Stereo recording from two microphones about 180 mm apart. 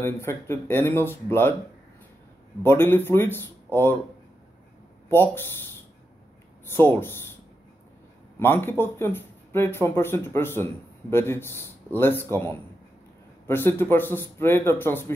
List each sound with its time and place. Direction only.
0.0 s speech: 15° left (ahead or behind)
2.6 s speech: 15° left (ahead or behind)
5.1 s speech: 10° left (ahead or behind)
6.7 s speech: 15° left (ahead or behind)
8.4 s speech: 10° left (ahead or behind)